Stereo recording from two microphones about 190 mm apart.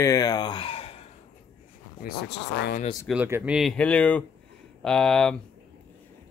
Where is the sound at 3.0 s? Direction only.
5° right (ahead or behind).